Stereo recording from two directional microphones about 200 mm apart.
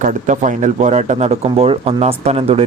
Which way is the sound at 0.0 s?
40° right (ahead or behind).